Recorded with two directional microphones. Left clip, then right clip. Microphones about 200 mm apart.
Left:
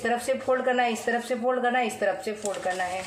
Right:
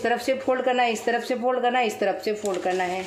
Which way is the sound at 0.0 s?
30° right (ahead or behind).